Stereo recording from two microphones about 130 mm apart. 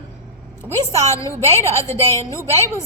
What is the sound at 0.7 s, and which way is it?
A woman's voice, 20° left (ahead or behind).